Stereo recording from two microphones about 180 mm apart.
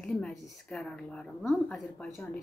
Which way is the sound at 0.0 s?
Centre (ahead or behind).